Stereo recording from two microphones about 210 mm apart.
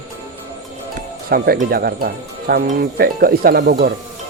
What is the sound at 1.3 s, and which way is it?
Speech, 45° right (ahead or behind).